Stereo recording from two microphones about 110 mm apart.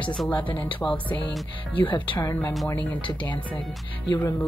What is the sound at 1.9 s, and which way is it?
Speech, 45° left (ahead or behind).